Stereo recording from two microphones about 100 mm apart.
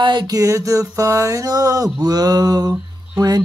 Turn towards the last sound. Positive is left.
turn(degrees=-40)  # may be behind; listen again after turning